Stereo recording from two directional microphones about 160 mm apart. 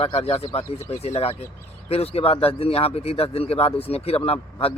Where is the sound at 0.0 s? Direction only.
35° left (ahead or behind).